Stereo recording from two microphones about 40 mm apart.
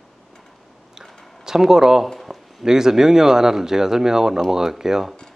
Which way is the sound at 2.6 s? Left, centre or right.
Centre.